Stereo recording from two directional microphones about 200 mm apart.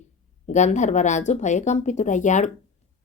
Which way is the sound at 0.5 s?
35° left (ahead or behind).